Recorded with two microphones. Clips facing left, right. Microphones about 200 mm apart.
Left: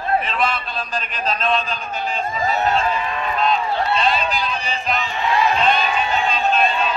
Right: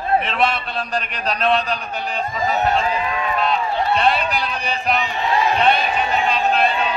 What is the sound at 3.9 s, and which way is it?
Speech, 60° right (ahead or behind).